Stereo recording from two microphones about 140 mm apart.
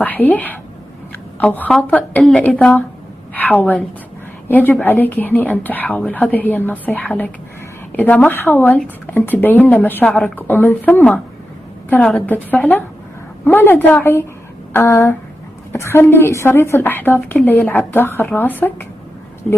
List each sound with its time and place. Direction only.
0.0 s a woman's voice: 10° left (ahead or behind)